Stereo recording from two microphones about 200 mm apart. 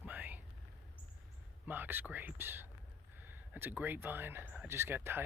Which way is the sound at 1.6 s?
10° right (ahead or behind).